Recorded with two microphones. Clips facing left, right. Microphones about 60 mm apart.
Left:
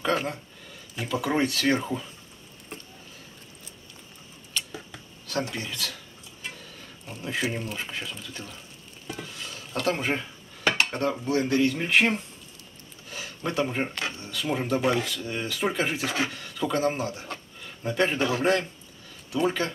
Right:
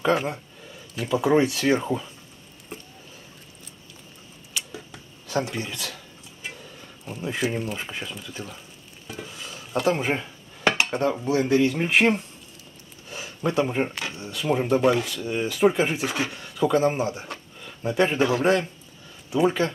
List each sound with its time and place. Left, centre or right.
0.0 s speech: centre
4.6 s a sound: centre
7.2 s speech: centre
7.4 s speech: centre
18.3 s a man's voice: right